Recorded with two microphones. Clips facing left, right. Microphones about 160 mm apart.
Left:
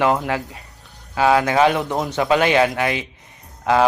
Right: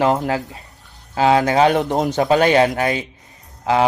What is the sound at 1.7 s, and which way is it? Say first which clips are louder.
A man's voice: right 4 dB; 45° right (ahead or behind).